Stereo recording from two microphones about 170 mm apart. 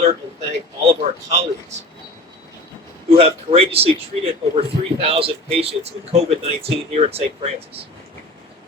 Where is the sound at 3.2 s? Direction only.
35° right (ahead or behind).